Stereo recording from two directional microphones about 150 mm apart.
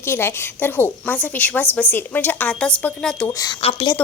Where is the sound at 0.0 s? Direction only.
15° left (ahead or behind).